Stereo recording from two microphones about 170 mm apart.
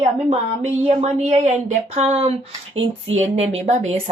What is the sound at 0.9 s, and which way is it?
Speech, 35° right (ahead or behind).